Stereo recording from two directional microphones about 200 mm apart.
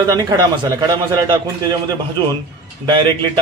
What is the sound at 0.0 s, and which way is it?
A man's voice, 20° right (ahead or behind).